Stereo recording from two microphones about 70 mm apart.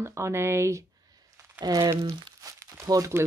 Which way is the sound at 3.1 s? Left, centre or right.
Right.